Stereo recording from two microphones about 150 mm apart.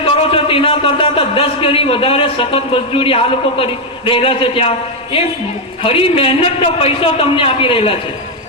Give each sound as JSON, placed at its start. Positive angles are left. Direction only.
{"t": 0.0, "sound": "a man's voice", "side_deg": 40}